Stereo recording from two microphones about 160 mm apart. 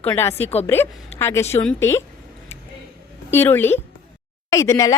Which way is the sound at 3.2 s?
15° left (ahead or behind).